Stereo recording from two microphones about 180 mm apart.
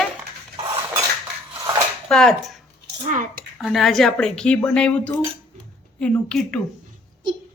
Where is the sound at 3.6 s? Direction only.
Centre (ahead or behind).